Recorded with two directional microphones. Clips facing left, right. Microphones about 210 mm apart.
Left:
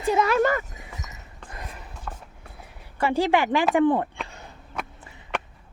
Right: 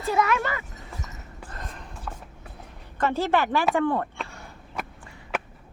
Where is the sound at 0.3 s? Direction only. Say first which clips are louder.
Left 6 dB; 40° left (ahead or behind).